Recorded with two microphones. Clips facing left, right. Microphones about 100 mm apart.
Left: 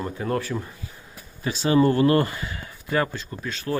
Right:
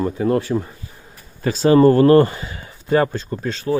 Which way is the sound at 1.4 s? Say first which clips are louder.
Right 7 dB; 40° right (ahead or behind).